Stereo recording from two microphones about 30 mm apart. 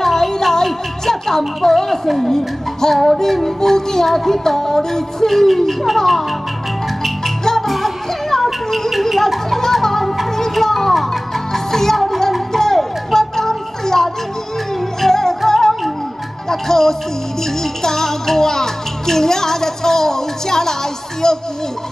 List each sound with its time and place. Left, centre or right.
0.0 s music: centre
5.9 s speech: centre
7.6 s music: centre